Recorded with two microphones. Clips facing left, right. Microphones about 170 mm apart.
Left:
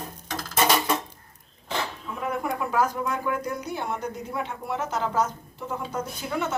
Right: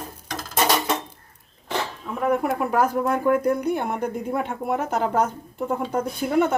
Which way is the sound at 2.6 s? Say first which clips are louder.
Right 4 dB; 55° right (ahead or behind).